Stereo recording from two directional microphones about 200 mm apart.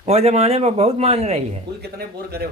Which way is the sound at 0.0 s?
30° right (ahead or behind).